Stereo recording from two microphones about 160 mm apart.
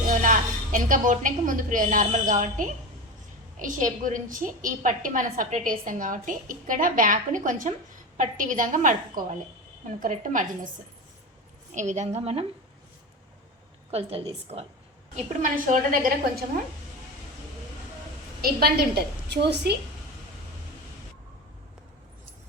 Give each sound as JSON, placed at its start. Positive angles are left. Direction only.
{"t": 0.1, "sound": "a woman's voice", "side_deg": -55}
{"t": 11.7, "sound": "a woman's voice", "side_deg": -50}
{"t": 13.9, "sound": "a woman's voice", "side_deg": -40}
{"t": 15.1, "sound": "a woman's voice", "side_deg": -55}
{"t": 18.4, "sound": "a woman's voice", "side_deg": -75}